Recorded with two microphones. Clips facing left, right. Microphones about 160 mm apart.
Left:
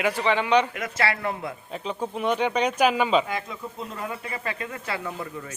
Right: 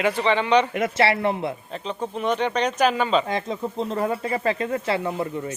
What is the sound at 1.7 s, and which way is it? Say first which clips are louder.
Speech: right 1 dB; 5° left (ahead or behind).